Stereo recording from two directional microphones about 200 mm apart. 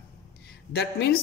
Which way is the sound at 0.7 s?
55° left (ahead or behind).